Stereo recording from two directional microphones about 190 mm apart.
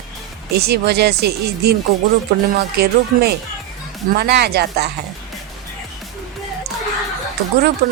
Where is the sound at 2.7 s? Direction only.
55° right (ahead or behind).